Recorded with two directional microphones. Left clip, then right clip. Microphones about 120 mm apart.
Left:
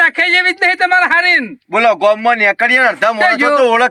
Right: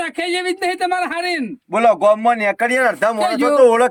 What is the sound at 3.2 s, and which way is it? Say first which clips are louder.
Speech: left 7 dB; 5° right (ahead or behind).